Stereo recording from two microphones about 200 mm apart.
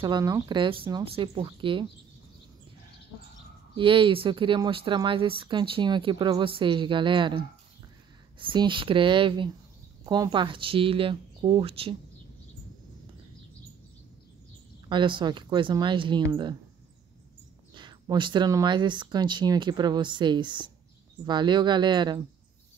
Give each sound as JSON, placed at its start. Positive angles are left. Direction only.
{"t": 0.0, "sound": "speech", "side_deg": -20}
{"t": 3.7, "sound": "speech", "side_deg": -25}
{"t": 14.9, "sound": "speech", "side_deg": -25}
{"t": 17.7, "sound": "speech", "side_deg": -25}